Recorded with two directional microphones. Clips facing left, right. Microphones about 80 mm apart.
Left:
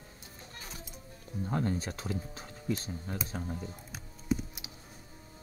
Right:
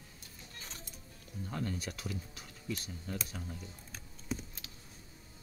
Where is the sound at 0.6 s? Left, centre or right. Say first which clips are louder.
Left 3 dB; centre.